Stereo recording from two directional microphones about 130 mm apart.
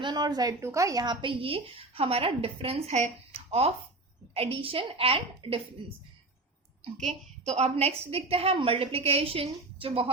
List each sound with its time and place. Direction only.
0.0 s a woman's voice: 30° right (ahead or behind)
6.9 s a woman's voice: 60° right (ahead or behind); by 10.1 s 45° right (ahead or behind)